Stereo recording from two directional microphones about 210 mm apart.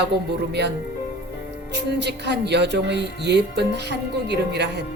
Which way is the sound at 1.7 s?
55° right (ahead or behind).